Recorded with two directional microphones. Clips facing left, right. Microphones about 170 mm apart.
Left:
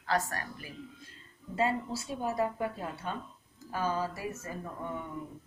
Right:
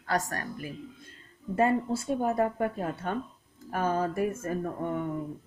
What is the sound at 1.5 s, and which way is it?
A woman's voice, 55° right (ahead or behind).